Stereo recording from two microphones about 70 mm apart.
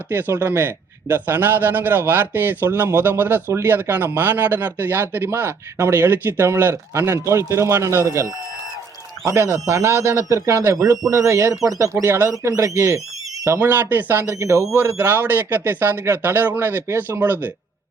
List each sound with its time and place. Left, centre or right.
0.1 s a man's voice: right
12.0 s speech: right
12.3 s a man's voice: right
13.6 s a man's voice: right
14.3 s a man's voice: right